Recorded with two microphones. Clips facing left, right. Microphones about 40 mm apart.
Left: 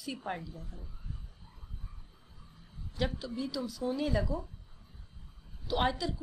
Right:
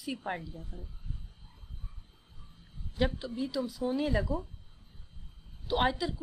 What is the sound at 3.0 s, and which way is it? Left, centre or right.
A woman's voice, right.